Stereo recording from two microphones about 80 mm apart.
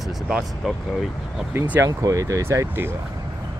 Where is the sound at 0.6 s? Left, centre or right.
Centre.